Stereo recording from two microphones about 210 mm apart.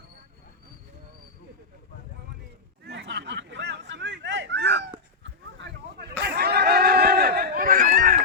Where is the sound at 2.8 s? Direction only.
55° right (ahead or behind).